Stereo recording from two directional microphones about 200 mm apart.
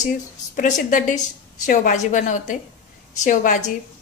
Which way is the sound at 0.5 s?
40° left (ahead or behind).